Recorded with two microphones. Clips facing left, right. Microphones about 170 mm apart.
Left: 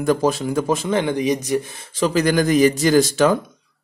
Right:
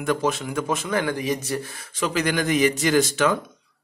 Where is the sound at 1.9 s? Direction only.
35° left (ahead or behind).